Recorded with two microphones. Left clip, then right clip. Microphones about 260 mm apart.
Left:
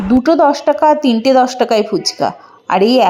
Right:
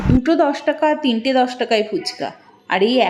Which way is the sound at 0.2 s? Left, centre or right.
Centre.